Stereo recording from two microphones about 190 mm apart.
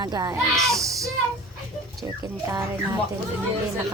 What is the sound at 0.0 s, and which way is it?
Speech, 20° right (ahead or behind).